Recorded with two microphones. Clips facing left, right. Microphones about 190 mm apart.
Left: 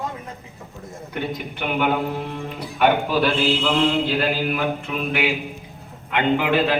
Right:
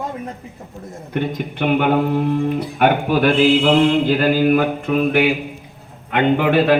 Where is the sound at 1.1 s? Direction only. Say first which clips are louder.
Right 6 dB; 45° right (ahead or behind).